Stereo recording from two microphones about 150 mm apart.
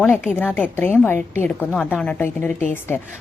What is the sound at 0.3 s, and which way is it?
A woman's voice, 10° left (ahead or behind).